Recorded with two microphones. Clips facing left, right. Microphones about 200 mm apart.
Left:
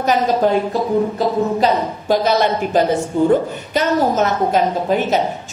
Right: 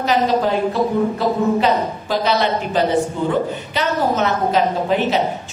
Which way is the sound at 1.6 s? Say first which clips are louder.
Left 1 dB; 45° left (ahead or behind).